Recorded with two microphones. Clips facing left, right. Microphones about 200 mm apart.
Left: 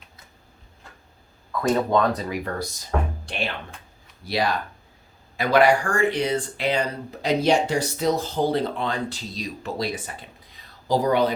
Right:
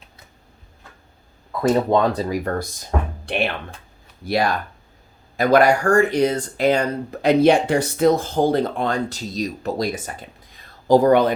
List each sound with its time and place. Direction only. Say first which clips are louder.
1.6 s speech: right 3 dB; 25° right (ahead or behind)
2.3 s speech: right 5 dB; 45° right (ahead or behind)
3.2 s speech: right 7 dB; 60° right (ahead or behind)
4.3 s speech: right 4 dB; 50° right (ahead or behind)